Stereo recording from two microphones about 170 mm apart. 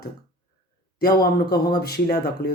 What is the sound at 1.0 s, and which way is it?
Speech, 65° left (ahead or behind).